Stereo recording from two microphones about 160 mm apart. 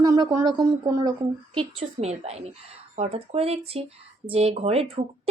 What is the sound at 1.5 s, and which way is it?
Speech, 40° right (ahead or behind).